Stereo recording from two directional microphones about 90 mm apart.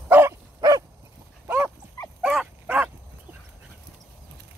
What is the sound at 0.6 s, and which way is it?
Dog, 45° right (ahead or behind).